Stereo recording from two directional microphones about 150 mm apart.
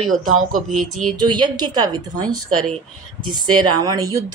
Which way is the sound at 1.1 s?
30° right (ahead or behind).